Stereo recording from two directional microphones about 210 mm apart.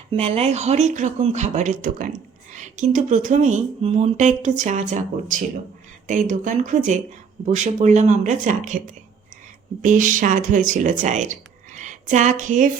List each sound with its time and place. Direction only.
0.1 s speech: 30° right (ahead or behind)
9.8 s speech: 40° right (ahead or behind)